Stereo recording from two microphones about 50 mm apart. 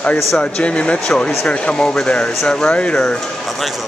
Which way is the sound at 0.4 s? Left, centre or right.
Left.